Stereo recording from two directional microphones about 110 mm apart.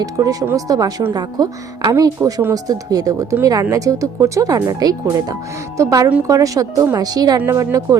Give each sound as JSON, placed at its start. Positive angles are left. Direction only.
{"t": 0.0, "sound": "speech", "side_deg": -30}